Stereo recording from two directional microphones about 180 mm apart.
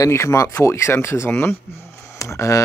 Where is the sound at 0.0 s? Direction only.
15° left (ahead or behind).